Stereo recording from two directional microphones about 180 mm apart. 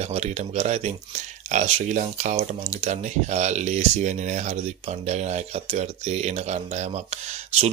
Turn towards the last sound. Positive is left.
turn(degrees=-35)  # may be behind; listen again after turning